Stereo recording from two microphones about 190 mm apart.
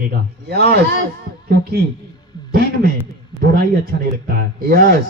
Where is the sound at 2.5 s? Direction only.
50° right (ahead or behind).